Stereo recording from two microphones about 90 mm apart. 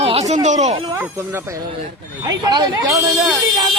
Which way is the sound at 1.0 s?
30° right (ahead or behind).